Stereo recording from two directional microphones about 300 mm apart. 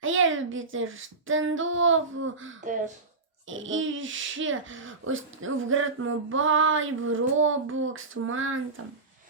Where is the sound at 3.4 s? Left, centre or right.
Right.